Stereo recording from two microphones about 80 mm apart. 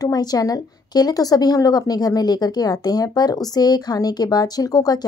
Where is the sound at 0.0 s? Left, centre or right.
Left.